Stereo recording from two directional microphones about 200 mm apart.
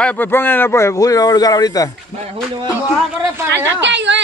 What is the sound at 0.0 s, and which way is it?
Speech, 10° left (ahead or behind).